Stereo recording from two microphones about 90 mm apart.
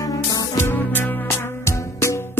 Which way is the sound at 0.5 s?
25° left (ahead or behind).